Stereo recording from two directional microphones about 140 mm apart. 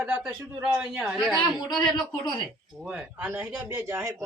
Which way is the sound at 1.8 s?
30° left (ahead or behind).